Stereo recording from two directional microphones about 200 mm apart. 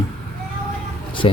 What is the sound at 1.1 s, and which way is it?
Vehicle, 25° left (ahead or behind).